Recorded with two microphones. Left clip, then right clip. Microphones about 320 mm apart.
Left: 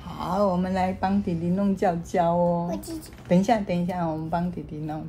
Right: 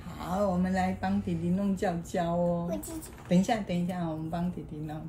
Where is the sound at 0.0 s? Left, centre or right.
Left.